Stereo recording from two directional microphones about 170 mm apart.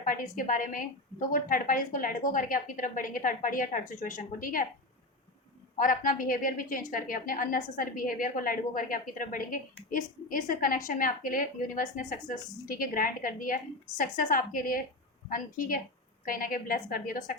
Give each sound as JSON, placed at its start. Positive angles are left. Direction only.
{"t": 0.0, "sound": "a woman's voice", "side_deg": 55}
{"t": 5.8, "sound": "a woman's voice", "side_deg": 55}